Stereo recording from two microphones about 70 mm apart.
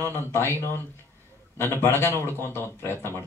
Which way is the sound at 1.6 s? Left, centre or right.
Left.